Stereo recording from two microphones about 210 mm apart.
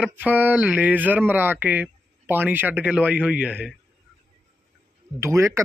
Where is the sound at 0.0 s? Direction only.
10° right (ahead or behind).